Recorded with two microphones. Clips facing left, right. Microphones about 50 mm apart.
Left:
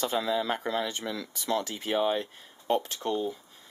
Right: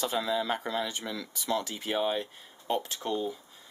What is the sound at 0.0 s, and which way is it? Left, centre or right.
Speech, centre.